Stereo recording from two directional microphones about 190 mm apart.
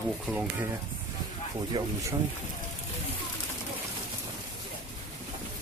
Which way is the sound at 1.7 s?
20° right (ahead or behind).